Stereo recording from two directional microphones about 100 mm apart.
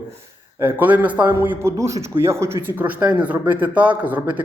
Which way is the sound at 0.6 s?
15° right (ahead or behind).